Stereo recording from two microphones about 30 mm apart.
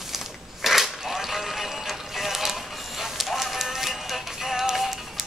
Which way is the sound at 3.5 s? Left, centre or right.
Centre.